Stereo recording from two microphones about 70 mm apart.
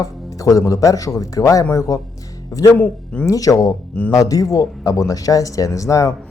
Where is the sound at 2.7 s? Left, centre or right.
Left.